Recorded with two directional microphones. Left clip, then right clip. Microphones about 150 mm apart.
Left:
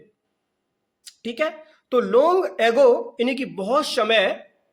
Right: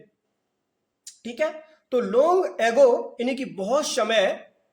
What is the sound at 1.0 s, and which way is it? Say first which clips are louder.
A woman's voice: left 2 dB; 35° left (ahead or behind).